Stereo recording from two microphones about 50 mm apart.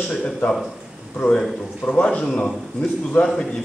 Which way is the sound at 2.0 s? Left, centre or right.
Left.